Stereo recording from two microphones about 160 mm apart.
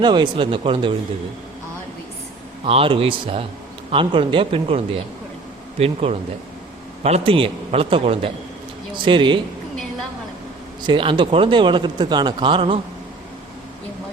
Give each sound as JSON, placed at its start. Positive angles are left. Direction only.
{"t": 0.0, "sound": "speech", "side_deg": -30}
{"t": 2.6, "sound": "speech", "side_deg": -35}
{"t": 5.8, "sound": "speech", "side_deg": -40}
{"t": 10.8, "sound": "speech", "side_deg": -30}